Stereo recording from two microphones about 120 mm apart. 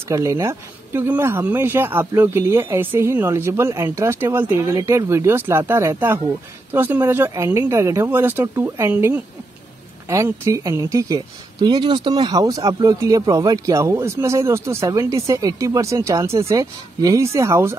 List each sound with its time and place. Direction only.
0.1 s speech: 25° right (ahead or behind)